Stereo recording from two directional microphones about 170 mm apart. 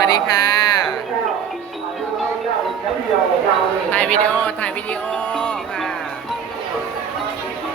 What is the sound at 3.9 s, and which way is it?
Speech, 5° left (ahead or behind).